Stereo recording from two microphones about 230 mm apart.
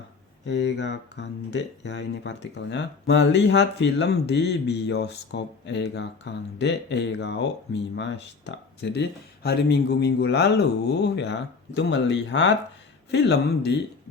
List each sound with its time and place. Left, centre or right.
0.4 s speech: left